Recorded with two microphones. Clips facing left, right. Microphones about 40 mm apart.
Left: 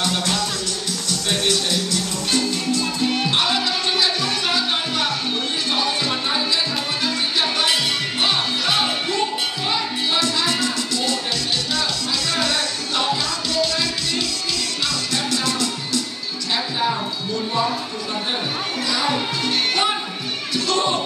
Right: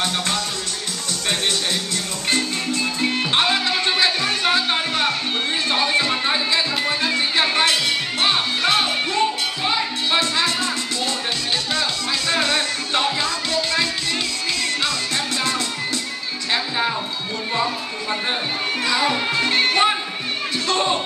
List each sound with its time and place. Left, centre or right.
1.3 s music: right
10.1 s music: right
12.3 s music: right
18.9 s music: right